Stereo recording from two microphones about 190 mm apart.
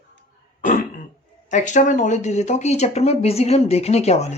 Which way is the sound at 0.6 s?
40° left (ahead or behind).